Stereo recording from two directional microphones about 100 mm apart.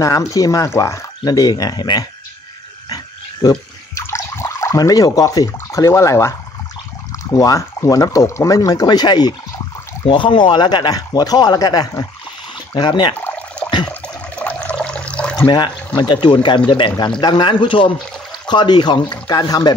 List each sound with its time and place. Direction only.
0.0 s speech: 35° left (ahead or behind)
3.4 s speech: 40° left (ahead or behind)
4.0 s speech: 30° left (ahead or behind); by 13.1 s 50° left (ahead or behind)
13.6 s water: centre (ahead or behind)
15.4 s speech: 50° left (ahead or behind)